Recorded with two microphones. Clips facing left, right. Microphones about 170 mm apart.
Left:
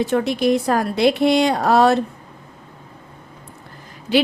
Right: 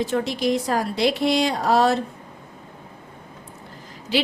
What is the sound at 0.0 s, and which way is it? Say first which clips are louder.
A woman's voice: left 4 dB; 55° left (ahead or behind).